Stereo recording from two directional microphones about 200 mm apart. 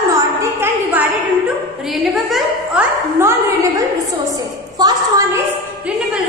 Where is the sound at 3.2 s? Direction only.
15° right (ahead or behind).